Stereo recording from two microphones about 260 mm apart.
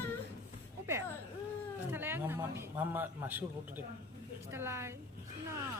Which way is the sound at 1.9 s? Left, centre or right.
Centre.